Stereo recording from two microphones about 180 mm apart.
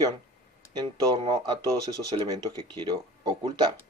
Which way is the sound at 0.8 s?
30° right (ahead or behind).